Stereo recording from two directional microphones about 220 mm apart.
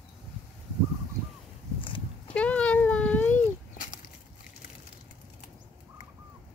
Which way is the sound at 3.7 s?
35° left (ahead or behind).